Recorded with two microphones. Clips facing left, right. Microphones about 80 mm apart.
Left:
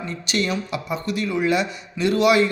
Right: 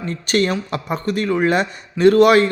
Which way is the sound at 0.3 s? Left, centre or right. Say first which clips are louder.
Right 5 dB; right.